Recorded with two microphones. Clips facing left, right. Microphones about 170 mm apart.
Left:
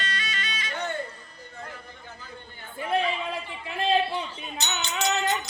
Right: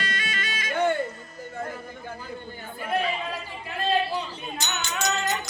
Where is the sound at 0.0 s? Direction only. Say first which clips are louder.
Right 2 dB; 50° right (ahead or behind).